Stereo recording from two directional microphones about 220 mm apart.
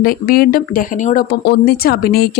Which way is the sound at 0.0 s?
40° left (ahead or behind).